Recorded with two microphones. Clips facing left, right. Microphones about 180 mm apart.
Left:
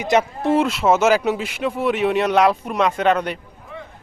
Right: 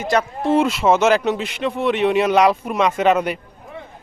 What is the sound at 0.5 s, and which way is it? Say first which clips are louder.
Speech: right 1 dB; centre (ahead or behind).